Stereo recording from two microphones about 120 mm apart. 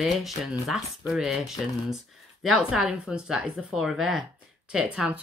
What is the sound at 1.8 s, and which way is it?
Speech, 5° right (ahead or behind).